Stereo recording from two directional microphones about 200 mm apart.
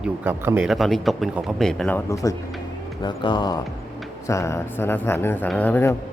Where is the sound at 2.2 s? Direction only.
15° left (ahead or behind).